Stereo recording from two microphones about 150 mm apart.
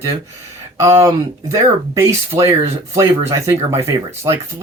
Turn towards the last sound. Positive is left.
turn(degrees=-20)  # may be behind; listen again after turning